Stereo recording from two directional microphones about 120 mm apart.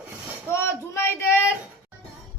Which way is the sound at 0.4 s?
20° left (ahead or behind).